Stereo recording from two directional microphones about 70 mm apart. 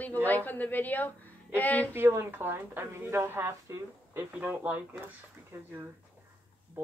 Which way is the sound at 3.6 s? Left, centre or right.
Right.